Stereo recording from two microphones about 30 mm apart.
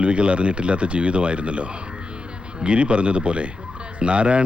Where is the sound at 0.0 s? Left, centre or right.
Right.